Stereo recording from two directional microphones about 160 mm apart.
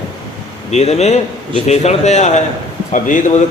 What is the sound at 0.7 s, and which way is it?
A man's voice, 40° left (ahead or behind).